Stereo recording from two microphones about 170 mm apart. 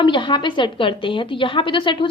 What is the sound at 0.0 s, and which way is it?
A woman's voice, 30° left (ahead or behind).